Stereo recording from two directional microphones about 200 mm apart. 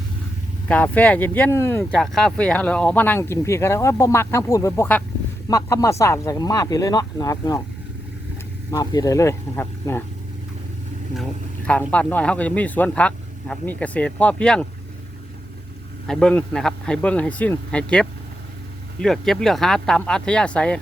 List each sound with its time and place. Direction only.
0.7 s speech: 5° left (ahead or behind)
8.7 s speech: 20° left (ahead or behind)
11.9 s speech: 5° left (ahead or behind)
16.0 s a man's voice: 5° left (ahead or behind)